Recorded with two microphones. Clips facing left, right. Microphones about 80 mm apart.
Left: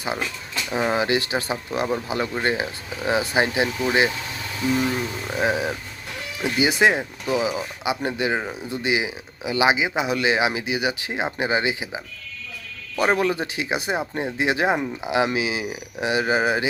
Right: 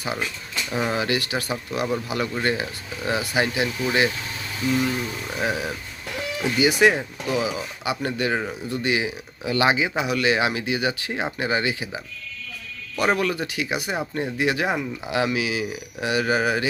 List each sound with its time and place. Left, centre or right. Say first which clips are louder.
0.7 s speech: left 3 dB; left
5.3 s speech: left 4 dB; left
13.0 s speech: left 2 dB; left